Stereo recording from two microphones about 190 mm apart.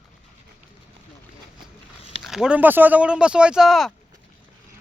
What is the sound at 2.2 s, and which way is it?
Speech, 5° right (ahead or behind).